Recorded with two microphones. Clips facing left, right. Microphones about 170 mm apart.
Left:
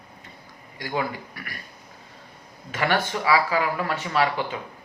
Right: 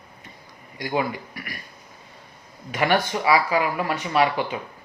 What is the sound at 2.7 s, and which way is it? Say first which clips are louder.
A man's voice: right 3 dB; 15° right (ahead or behind).